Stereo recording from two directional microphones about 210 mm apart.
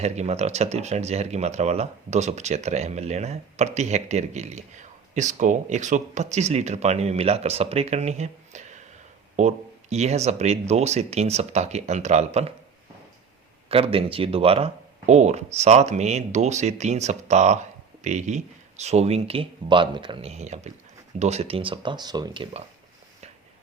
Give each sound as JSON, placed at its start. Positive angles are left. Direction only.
{"t": 0.0, "sound": "speech", "side_deg": -30}
{"t": 13.7, "sound": "speech", "side_deg": -25}